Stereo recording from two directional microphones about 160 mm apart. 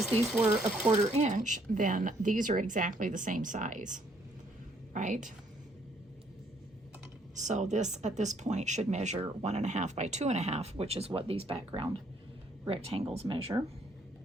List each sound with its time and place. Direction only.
0.3 s speech: 10° right (ahead or behind)
0.9 s speech: 45° right (ahead or behind)
7.3 s speech: 45° right (ahead or behind)
12.6 s speech: 35° right (ahead or behind)